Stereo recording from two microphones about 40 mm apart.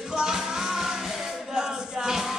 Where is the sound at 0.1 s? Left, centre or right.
Centre.